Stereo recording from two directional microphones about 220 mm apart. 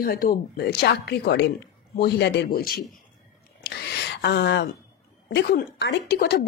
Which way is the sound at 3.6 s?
50° left (ahead or behind).